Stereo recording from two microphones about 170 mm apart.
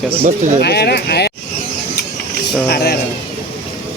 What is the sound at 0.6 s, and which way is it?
Speech, 70° left (ahead or behind).